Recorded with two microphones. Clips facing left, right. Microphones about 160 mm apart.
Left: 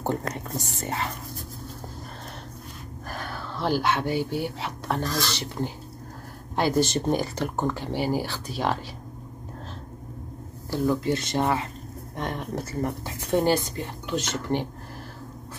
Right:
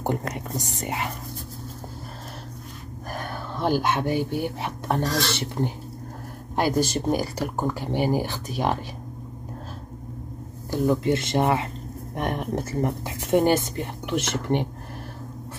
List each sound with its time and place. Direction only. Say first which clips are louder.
0.0 s speech: right 1 dB; 15° right (ahead or behind)
3.1 s a sound: right 2 dB; 15° right (ahead or behind)
3.9 s speech: right 1 dB; 15° right (ahead or behind)
5.0 s dishes: right 3 dB; 55° right (ahead or behind)
5.4 s speech: right 3 dB; 20° right (ahead or behind)
6.5 s speech: even; 10° right (ahead or behind)
10.7 s speech: right 2 dB; 20° right (ahead or behind)